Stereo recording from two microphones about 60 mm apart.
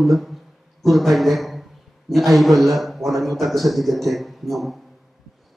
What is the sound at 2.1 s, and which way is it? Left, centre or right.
A man's voice, centre.